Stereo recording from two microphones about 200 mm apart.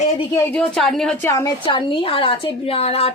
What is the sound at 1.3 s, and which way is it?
A woman's voice, 15° left (ahead or behind).